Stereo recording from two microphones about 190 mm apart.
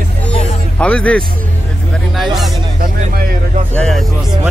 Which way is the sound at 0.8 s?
5° left (ahead or behind).